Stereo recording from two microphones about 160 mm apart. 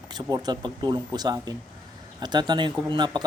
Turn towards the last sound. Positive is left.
turn(degrees=-25)  # may be behind; listen again after turning